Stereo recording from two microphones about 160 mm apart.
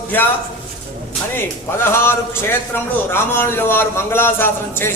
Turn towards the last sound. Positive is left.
turn(degrees=15)  # may be behind; listen again after turning